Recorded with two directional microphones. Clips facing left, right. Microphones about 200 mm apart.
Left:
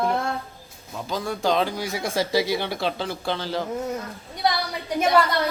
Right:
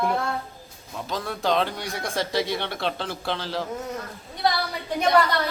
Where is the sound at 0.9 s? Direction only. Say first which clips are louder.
Left 2 dB; centre (ahead or behind).